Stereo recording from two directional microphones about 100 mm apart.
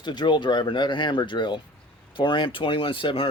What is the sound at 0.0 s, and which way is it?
Speech, 50° left (ahead or behind).